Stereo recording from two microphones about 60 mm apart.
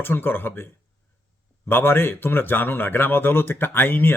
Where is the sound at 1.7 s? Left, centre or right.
Left.